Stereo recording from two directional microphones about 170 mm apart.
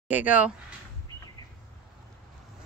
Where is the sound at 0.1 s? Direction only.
10° right (ahead or behind).